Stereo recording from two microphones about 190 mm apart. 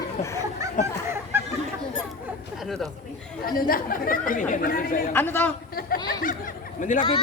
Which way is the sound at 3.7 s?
50° left (ahead or behind).